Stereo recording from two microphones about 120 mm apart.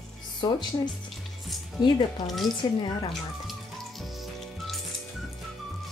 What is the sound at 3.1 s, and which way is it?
Music, centre (ahead or behind).